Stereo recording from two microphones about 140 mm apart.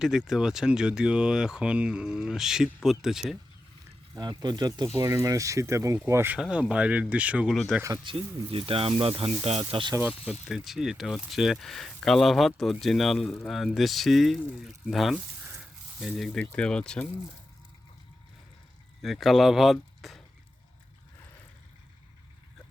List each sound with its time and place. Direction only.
0.0 s speech: 5° right (ahead or behind)
4.1 s speech: 30° right (ahead or behind); by 7.9 s 5° right (ahead or behind)
8.1 s speech: 35° right (ahead or behind)
10.5 s speech: centre (ahead or behind)
19.0 s speech: centre (ahead or behind)